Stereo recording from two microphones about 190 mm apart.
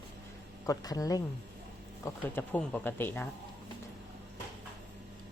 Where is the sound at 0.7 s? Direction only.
20° left (ahead or behind).